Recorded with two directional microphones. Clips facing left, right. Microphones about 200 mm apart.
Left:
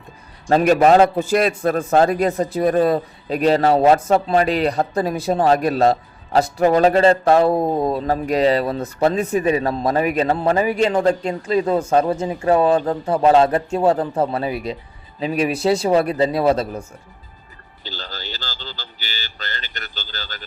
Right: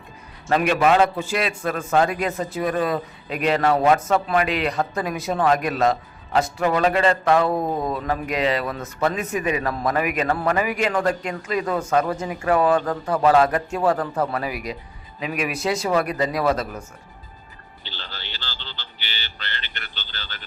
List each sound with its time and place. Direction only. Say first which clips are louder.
0.6 s a man's voice: left 5 dB; 40° left (ahead or behind)
17.8 s speech: left 6 dB; 40° left (ahead or behind)